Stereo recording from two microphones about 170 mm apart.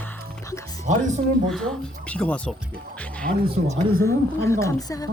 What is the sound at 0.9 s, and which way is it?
Speech, 45° right (ahead or behind).